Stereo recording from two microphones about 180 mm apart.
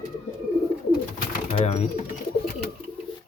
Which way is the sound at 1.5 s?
35° left (ahead or behind).